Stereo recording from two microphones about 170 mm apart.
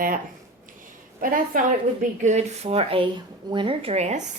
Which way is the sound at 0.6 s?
50° right (ahead or behind).